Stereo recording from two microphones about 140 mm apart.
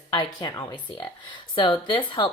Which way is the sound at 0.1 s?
30° left (ahead or behind).